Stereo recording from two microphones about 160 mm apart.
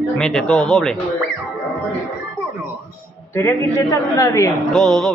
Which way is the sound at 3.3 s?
20° left (ahead or behind).